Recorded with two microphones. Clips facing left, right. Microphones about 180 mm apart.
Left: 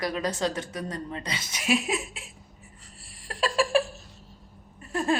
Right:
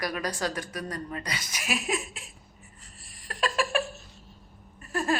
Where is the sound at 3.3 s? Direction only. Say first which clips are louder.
Left 4 dB; 30° left (ahead or behind).